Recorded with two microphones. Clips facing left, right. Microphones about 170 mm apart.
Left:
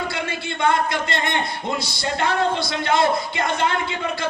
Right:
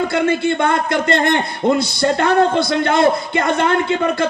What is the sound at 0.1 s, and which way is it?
A man's voice, 55° right (ahead or behind).